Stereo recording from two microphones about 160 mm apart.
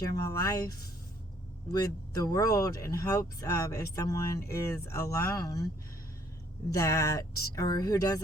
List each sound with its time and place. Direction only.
0.2 s speech: 20° left (ahead or behind)
1.7 s speech: 20° left (ahead or behind)
6.7 s speech: 20° left (ahead or behind)